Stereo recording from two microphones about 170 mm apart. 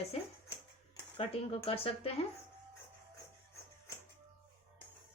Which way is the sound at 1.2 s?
35° left (ahead or behind).